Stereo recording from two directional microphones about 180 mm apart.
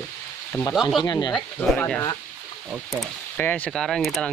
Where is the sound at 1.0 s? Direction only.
25° left (ahead or behind).